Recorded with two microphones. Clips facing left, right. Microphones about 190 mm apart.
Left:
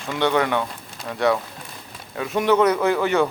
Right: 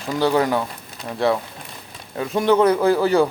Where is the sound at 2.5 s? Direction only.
30° right (ahead or behind).